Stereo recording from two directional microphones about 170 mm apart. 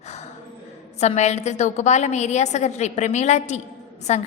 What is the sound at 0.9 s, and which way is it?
A woman's voice, 40° left (ahead or behind).